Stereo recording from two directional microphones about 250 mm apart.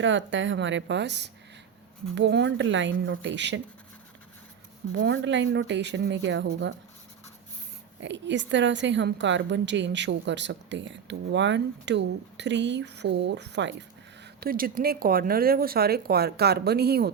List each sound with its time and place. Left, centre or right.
0.0 s a woman's voice: right
4.9 s a woman's voice: right
8.0 s a woman's voice: right